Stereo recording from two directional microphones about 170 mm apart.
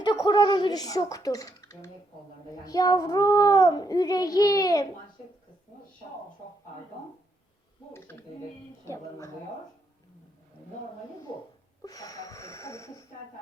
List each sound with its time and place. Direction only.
0.0 s speech: 25° left (ahead or behind)
2.6 s child singing: 20° left (ahead or behind)
8.8 s a woman's voice: 20° left (ahead or behind)
11.8 s child singing: 20° left (ahead or behind)